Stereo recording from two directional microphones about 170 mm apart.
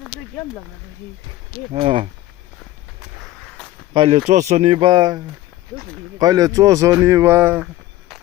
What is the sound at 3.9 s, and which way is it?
Speech, 30° right (ahead or behind).